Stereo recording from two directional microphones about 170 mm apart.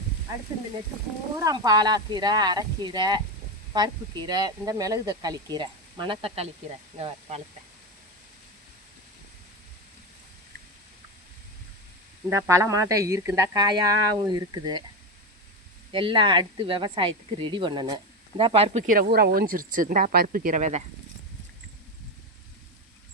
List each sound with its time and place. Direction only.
1.4 s speech: 20° right (ahead or behind); by 7.4 s 40° right (ahead or behind)
12.3 s speech: 15° right (ahead or behind)
15.9 s speech: 30° right (ahead or behind)